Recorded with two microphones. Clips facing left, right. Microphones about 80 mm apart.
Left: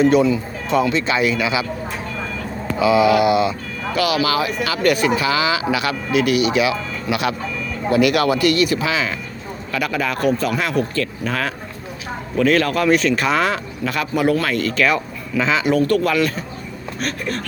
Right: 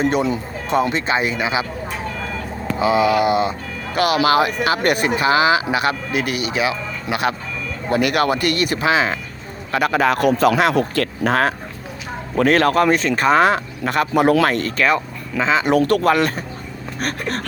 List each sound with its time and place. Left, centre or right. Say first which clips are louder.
0.0 s speech: left 4 dB; right
2.7 s speech: left 2 dB; right
14.7 s speech: even; right
15.6 s speech: right 2 dB; right